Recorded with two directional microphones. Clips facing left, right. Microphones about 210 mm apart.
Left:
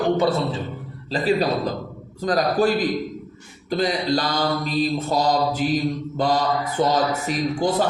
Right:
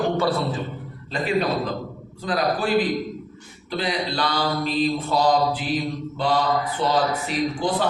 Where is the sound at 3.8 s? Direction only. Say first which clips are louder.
Left 3 dB; 45° left (ahead or behind).